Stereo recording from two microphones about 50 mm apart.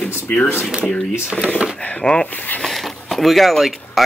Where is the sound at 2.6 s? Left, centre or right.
Centre.